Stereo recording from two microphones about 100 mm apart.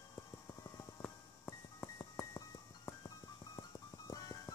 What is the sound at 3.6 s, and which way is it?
Music, 40° left (ahead or behind).